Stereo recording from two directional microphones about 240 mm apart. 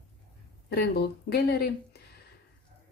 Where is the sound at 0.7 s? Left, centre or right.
Left.